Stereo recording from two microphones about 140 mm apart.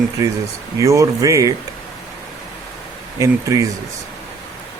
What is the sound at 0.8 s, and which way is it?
Speech, 20° right (ahead or behind).